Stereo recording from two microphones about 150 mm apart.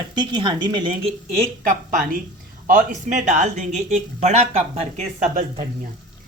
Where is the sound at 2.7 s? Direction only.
60° right (ahead or behind); by 4.8 s 45° right (ahead or behind).